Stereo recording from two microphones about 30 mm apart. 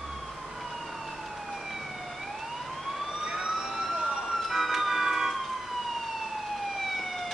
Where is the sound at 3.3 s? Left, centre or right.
Centre.